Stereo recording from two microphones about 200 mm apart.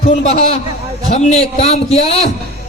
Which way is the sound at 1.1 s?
35° left (ahead or behind).